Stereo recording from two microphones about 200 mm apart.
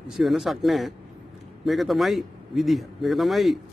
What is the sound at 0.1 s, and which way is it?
Speech, centre (ahead or behind).